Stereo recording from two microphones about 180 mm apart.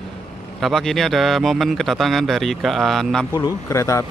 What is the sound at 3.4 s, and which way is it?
Speech, 20° left (ahead or behind).